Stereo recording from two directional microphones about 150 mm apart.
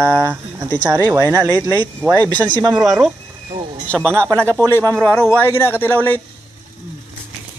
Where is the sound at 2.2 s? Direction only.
10° left (ahead or behind).